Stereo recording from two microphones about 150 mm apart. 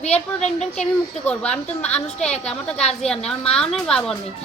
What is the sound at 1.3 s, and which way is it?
A woman's voice, 10° left (ahead or behind).